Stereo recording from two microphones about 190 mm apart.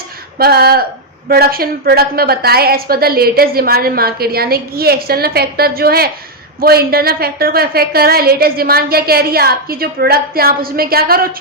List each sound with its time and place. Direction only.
0.3 s a woman's voice: 55° right (ahead or behind)